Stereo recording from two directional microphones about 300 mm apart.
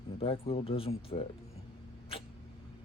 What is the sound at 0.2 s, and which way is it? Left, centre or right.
Speech, centre.